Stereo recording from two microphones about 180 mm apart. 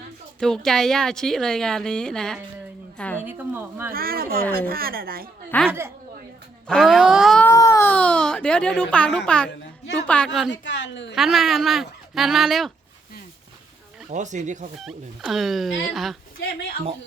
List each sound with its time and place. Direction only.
0.3 s speech: centre (ahead or behind)
3.0 s a sound: 10° left (ahead or behind)
3.2 s a woman's voice: 10° right (ahead or behind)
3.9 s a woman's voice: 55° right (ahead or behind)
5.5 s speech: 5° left (ahead or behind)
7.4 s speech: 15° left (ahead or behind)
10.5 s speech: 80° left
11.1 s speech: centre (ahead or behind)
14.1 s speech: 40° right (ahead or behind)
14.8 s speech: centre (ahead or behind)